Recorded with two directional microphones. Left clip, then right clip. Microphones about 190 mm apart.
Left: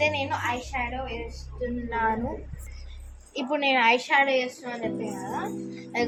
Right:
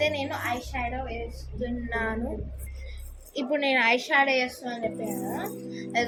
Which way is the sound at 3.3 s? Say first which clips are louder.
Left 1 dB; 15° left (ahead or behind).